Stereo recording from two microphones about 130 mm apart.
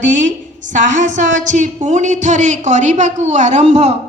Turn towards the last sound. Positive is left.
turn(degrees=-60)  # may be behind; listen again after turning